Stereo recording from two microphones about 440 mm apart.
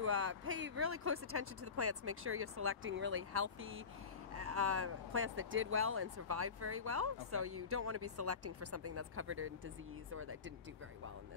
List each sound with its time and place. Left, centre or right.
0.0 s speech: right